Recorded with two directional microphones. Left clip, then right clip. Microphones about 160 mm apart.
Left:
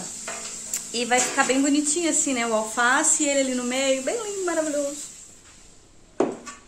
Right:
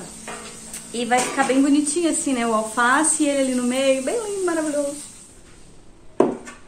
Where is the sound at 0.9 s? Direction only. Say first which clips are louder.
Right 2 dB; 40° left (ahead or behind).